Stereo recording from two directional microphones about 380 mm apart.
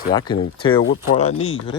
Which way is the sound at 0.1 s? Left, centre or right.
Centre.